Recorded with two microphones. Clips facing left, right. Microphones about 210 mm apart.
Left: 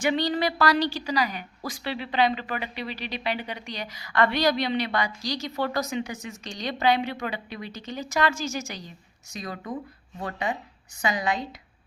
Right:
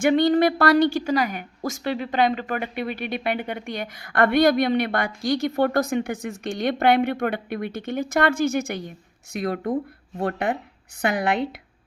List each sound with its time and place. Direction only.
0.0 s a woman's voice: 50° right (ahead or behind)